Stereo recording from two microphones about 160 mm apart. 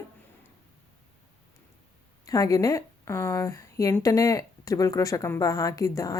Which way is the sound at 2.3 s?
20° left (ahead or behind).